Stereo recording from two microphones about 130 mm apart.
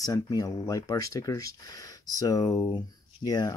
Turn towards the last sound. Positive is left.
turn(degrees=30)  # may be behind; listen again after turning